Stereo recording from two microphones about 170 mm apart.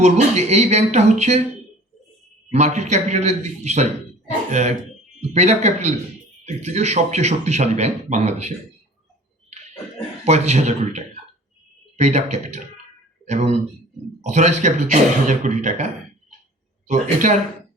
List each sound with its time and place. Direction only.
0.0 s speech: 40° right (ahead or behind)
2.5 s speech: 40° right (ahead or behind)
10.2 s speech: 40° right (ahead or behind)
16.9 s speech: 45° right (ahead or behind)